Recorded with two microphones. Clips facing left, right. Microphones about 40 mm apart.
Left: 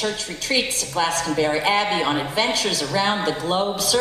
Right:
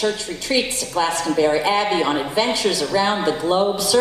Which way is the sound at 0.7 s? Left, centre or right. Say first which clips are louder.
Right 1 dB; centre.